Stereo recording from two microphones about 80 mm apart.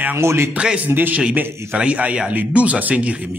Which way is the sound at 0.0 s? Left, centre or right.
Right.